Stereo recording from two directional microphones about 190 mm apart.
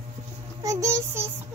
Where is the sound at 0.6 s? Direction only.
15° right (ahead or behind).